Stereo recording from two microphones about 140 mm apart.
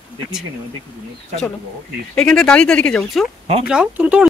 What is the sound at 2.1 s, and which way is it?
Speech, 5° left (ahead or behind).